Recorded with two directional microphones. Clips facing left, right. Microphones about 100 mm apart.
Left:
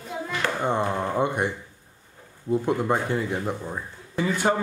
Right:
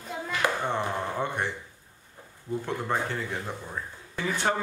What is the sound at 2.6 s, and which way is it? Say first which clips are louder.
A child's voice: left 4 dB; 15° left (ahead or behind).